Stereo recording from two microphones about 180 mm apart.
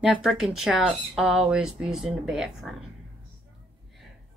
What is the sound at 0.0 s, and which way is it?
Speech, centre (ahead or behind).